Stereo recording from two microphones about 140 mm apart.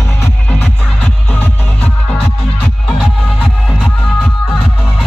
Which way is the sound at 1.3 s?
10° left (ahead or behind).